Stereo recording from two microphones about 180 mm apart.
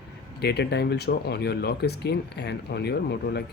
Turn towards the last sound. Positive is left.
turn(degrees=65)  # may be behind; listen again after turning